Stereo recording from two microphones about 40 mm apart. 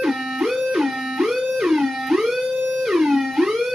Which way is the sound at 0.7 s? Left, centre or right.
Centre.